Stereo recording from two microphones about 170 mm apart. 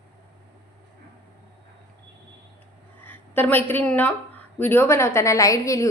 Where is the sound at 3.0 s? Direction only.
10° left (ahead or behind).